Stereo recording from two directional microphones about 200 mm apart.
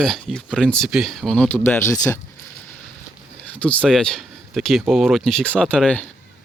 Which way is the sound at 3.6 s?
5° left (ahead or behind).